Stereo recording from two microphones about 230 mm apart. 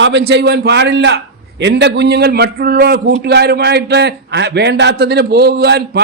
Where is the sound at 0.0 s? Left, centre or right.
Right.